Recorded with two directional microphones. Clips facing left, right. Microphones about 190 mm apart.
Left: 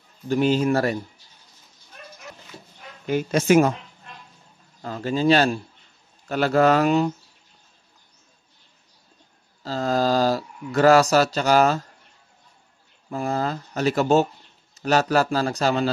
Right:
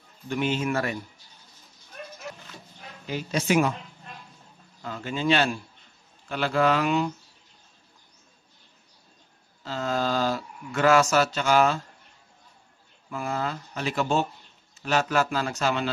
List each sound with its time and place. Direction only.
0.3 s a man's voice: 35° left (ahead or behind)
3.1 s speech: 50° left (ahead or behind)
4.8 s a man's voice: 40° left (ahead or behind)
9.6 s a sound: 35° left (ahead or behind)
13.1 s a man's voice: 35° left (ahead or behind)